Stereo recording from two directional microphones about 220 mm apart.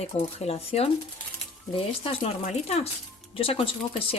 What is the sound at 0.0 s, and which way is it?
Speech, 30° left (ahead or behind).